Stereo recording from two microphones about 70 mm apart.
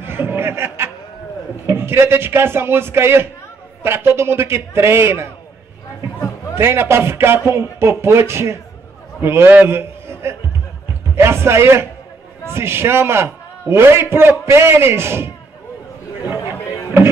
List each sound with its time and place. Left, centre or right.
0.0 s chuckle: right
1.7 s a man's voice: right
6.5 s a man's voice: right